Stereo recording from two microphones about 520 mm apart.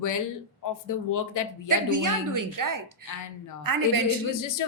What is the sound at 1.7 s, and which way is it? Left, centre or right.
A woman's voice, right.